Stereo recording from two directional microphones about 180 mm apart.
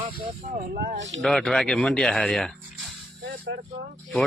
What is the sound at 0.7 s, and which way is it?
Speech, 75° right (ahead or behind).